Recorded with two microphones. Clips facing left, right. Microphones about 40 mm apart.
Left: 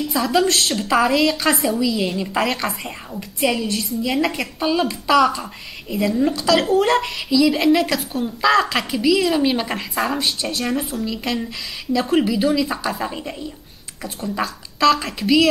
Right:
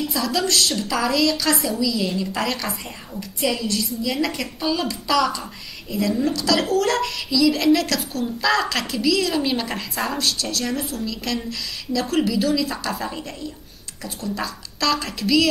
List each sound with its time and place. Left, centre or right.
0.1 s a woman's voice: left
0.5 s a woman's voice: centre
14.4 s speech: centre
15.1 s a woman's voice: left